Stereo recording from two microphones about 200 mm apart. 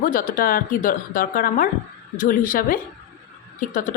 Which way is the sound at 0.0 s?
45° left (ahead or behind).